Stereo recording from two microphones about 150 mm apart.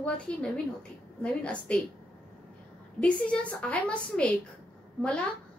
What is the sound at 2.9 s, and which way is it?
A woman's voice, 10° left (ahead or behind).